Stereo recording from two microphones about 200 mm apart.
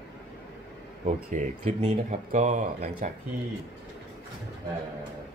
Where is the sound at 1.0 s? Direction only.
35° right (ahead or behind).